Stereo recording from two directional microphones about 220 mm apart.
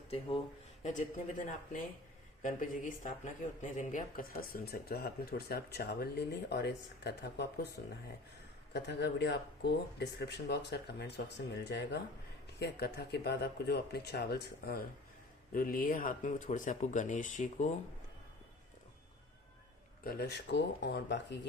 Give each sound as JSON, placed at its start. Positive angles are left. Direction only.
{"t": 0.8, "sound": "speech", "side_deg": 35}
{"t": 8.7, "sound": "speech", "side_deg": 50}
{"t": 20.1, "sound": "speech", "side_deg": 50}